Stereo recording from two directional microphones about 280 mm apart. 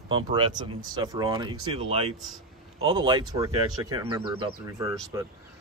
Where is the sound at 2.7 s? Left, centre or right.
Centre.